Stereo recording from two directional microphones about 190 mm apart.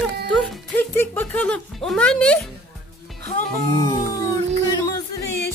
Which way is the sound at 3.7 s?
20° left (ahead or behind).